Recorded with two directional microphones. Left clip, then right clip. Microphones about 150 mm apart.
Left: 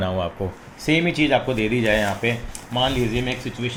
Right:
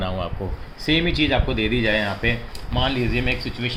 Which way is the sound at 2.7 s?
10° left (ahead or behind).